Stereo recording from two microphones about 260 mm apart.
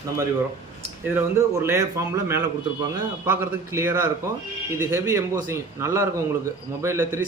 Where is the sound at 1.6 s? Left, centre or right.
Centre.